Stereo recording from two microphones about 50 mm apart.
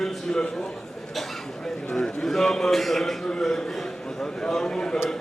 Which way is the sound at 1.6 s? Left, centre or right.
Centre.